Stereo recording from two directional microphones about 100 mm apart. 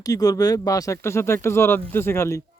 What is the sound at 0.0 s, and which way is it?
Speech, 35° left (ahead or behind).